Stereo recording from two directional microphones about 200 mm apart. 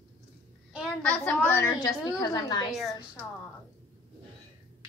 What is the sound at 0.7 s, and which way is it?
A woman's voice, 5° left (ahead or behind).